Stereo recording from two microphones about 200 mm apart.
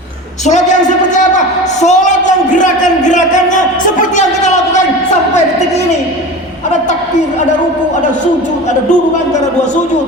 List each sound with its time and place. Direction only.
0.4 s a woman's voice: 35° left (ahead or behind)